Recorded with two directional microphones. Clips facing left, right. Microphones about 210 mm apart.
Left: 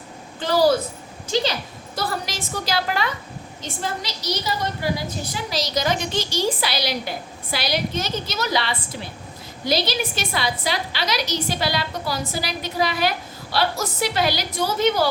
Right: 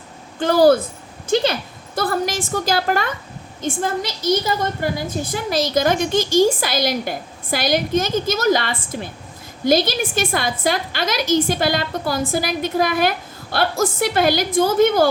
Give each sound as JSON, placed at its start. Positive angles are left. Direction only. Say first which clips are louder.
{"t": 0.3, "sound": "a woman's voice", "louder": "right 5 dB", "side_deg": -55}